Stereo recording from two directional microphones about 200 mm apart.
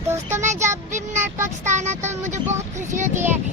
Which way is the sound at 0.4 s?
35° right (ahead or behind).